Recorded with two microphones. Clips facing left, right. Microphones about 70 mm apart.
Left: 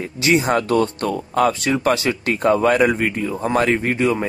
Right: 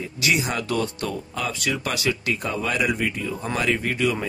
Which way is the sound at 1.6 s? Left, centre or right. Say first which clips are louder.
Left 7 dB; left.